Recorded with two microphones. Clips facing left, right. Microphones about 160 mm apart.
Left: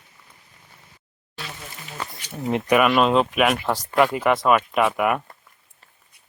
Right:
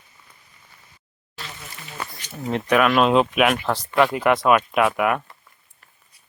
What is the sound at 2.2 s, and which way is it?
Speech, 10° left (ahead or behind).